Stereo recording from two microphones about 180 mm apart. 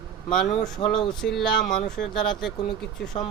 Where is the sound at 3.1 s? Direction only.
35° left (ahead or behind).